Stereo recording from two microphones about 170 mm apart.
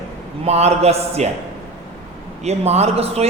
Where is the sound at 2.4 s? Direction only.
40° right (ahead or behind).